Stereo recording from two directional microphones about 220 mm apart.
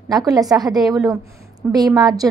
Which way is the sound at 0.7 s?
Centre (ahead or behind).